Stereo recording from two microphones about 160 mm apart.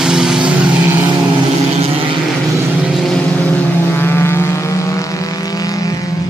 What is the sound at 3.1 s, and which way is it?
Vehicle, 10° left (ahead or behind).